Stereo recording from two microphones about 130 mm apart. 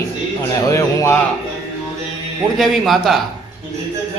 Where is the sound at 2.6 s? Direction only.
Centre (ahead or behind).